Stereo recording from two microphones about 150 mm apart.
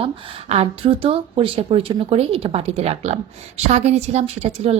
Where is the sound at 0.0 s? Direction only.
45° right (ahead or behind).